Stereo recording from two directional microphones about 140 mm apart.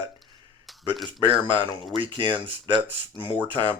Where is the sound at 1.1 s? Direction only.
35° right (ahead or behind).